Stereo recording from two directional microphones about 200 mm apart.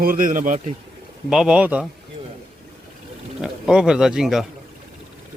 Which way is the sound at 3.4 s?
5° right (ahead or behind).